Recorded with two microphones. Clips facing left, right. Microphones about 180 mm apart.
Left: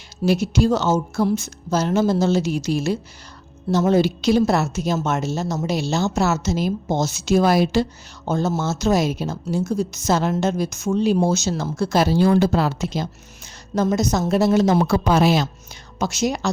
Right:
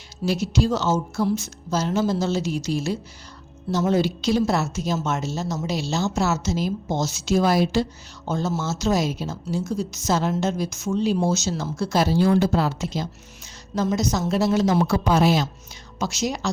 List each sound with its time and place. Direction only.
0.3 s a woman's voice: 55° left (ahead or behind)
13.7 s a woman's voice: 50° left (ahead or behind); by 15.4 s 70° left (ahead or behind)
16.0 s a woman's voice: 55° left (ahead or behind)